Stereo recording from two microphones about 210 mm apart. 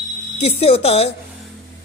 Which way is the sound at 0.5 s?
30° left (ahead or behind).